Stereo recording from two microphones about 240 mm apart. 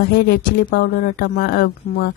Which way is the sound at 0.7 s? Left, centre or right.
Left.